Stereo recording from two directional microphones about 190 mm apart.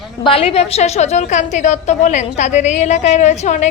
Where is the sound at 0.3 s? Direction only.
30° left (ahead or behind).